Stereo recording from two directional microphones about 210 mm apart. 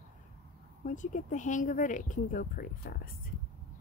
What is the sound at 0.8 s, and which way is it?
Speech, 35° left (ahead or behind).